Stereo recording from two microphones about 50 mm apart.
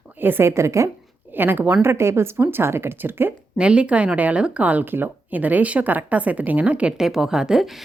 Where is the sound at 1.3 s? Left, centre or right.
Right.